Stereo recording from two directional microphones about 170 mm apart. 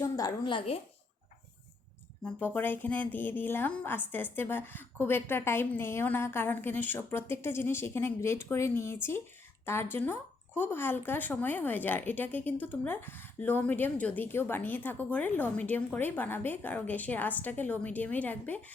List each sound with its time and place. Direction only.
0.0 s a sound: 20° left (ahead or behind)
0.4 s a woman's voice: 30° left (ahead or behind)
2.2 s speech: 10° left (ahead or behind)